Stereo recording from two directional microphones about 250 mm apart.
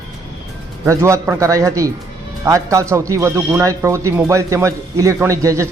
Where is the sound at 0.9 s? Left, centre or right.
Centre.